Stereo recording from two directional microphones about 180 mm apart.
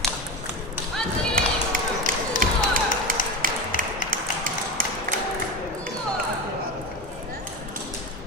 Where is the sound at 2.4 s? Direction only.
50° right (ahead or behind).